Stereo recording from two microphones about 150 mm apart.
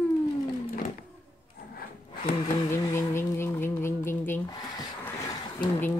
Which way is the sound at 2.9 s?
15° left (ahead or behind).